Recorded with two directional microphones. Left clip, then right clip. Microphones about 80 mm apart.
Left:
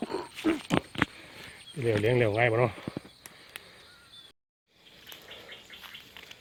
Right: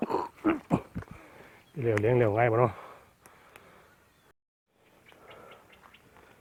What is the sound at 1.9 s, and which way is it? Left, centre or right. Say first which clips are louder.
Speech: right 1 dB; right.